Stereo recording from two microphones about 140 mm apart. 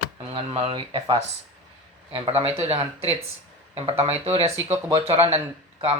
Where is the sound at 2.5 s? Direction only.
45° right (ahead or behind).